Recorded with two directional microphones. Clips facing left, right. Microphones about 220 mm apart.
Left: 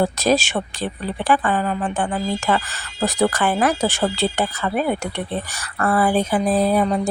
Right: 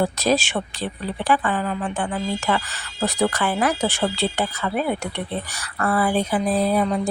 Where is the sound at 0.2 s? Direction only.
45° left (ahead or behind).